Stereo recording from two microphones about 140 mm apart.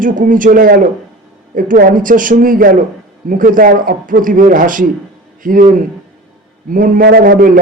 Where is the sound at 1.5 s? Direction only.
75° right (ahead or behind).